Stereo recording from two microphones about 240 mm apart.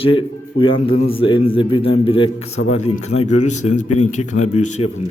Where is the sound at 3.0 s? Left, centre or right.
Left.